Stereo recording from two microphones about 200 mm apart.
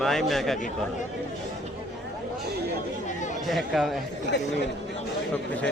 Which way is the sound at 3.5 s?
Centre (ahead or behind).